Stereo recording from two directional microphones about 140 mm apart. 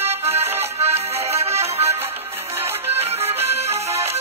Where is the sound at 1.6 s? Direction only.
45° right (ahead or behind).